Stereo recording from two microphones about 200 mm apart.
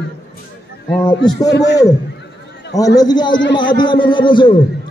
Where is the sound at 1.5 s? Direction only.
60° left (ahead or behind).